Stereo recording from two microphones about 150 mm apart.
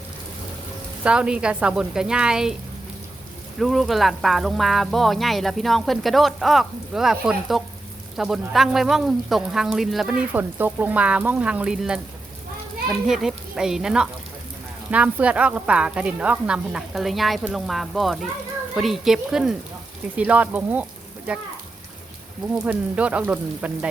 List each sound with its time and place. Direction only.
1.0 s speech: 5° right (ahead or behind)
3.6 s speech: centre (ahead or behind)
22.4 s speech: 10° right (ahead or behind)